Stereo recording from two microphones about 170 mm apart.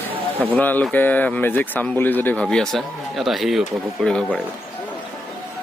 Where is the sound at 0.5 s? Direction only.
10° left (ahead or behind).